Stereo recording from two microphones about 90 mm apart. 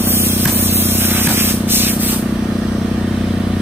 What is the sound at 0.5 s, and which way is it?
Spray, 25° right (ahead or behind).